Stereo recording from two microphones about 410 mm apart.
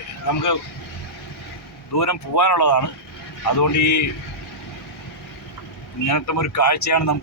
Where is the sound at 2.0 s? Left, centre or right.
Left.